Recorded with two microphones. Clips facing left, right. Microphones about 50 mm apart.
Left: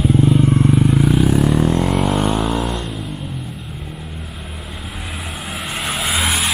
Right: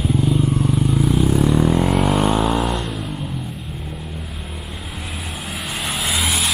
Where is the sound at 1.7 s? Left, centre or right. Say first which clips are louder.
Even; centre.